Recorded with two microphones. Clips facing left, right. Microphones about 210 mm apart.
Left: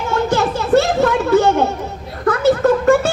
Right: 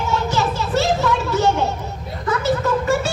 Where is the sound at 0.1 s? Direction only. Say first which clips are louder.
Left 6 dB; 55° left (ahead or behind).